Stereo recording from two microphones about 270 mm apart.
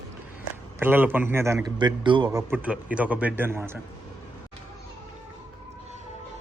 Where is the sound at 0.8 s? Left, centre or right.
Centre.